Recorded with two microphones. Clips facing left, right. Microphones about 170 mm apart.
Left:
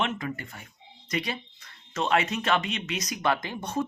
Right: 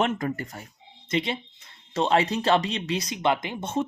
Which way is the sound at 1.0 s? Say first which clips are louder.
Right 4 dB; 25° right (ahead or behind).